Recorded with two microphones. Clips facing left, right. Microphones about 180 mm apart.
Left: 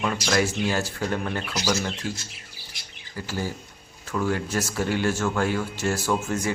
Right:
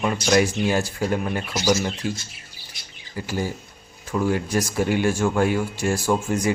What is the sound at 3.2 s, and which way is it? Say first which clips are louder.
Speech: right 3 dB; 15° right (ahead or behind).